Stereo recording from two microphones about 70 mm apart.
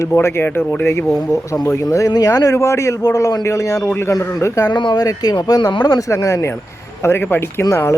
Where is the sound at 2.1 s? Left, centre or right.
Left.